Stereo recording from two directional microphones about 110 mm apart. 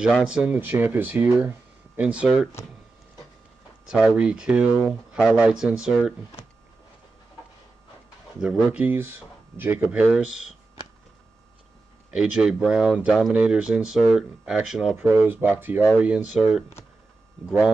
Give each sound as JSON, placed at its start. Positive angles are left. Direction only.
{"t": 0.0, "sound": "speech", "side_deg": -5}
{"t": 0.6, "sound": "speech", "side_deg": -20}
{"t": 3.8, "sound": "speech", "side_deg": -5}
{"t": 8.4, "sound": "speech", "side_deg": -10}
{"t": 9.8, "sound": "speech", "side_deg": -5}
{"t": 12.1, "sound": "speech", "side_deg": -5}
{"t": 15.2, "sound": "speech", "side_deg": -15}